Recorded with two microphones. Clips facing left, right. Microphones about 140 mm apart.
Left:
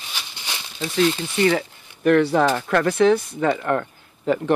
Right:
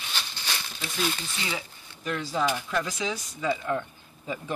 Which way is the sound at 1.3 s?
60° left (ahead or behind).